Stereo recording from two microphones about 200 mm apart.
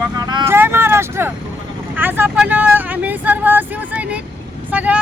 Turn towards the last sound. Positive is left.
turn(degrees=-5)  # may be behind; listen again after turning